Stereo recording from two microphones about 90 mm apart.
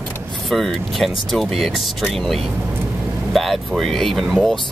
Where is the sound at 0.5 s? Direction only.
Centre (ahead or behind).